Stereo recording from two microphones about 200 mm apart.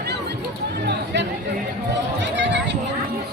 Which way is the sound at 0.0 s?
55° right (ahead or behind).